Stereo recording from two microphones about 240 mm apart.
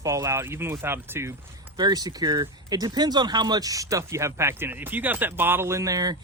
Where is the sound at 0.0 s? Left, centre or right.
Centre.